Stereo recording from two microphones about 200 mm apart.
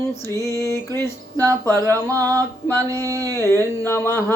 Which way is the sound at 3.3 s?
10° left (ahead or behind).